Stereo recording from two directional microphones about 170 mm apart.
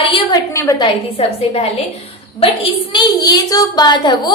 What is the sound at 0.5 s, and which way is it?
Speech, 20° left (ahead or behind).